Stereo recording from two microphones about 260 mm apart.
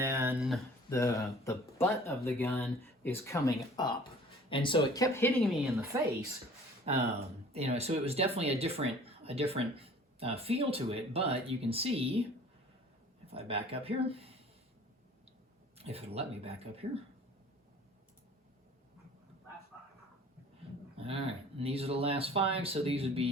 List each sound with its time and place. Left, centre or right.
0.0 s a sound: centre
0.9 s speech: centre
7.5 s speech: right
15.8 s speech: right
21.0 s speech: right